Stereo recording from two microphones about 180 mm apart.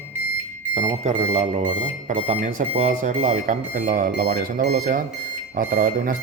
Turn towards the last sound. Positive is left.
turn(degrees=-55)  # may be behind; listen again after turning